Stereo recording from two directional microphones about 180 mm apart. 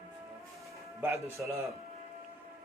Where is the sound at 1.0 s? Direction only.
10° right (ahead or behind).